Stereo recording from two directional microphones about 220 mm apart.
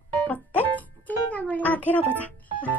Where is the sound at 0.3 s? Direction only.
5° left (ahead or behind).